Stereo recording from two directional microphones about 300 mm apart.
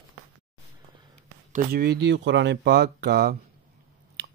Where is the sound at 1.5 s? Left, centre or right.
Right.